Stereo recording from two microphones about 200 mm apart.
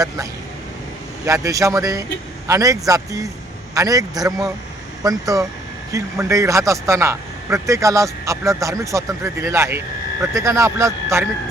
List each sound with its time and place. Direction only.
1.2 s a man's voice: 15° right (ahead or behind)